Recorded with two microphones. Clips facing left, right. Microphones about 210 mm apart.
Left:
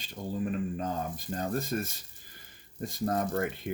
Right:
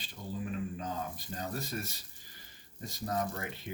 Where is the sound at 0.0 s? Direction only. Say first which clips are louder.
Left 6 dB; 45° left (ahead or behind).